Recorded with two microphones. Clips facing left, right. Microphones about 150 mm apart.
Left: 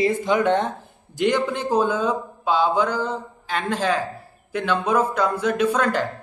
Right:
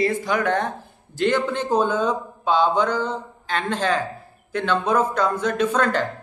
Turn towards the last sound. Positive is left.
turn(degrees=10)  # may be behind; listen again after turning